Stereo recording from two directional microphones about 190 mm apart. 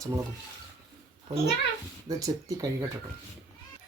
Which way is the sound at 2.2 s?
15° right (ahead or behind).